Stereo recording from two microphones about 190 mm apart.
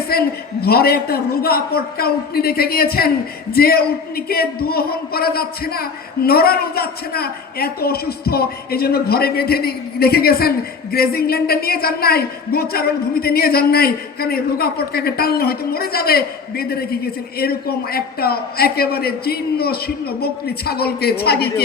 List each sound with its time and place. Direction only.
0.1 s a man's voice: 55° left (ahead or behind)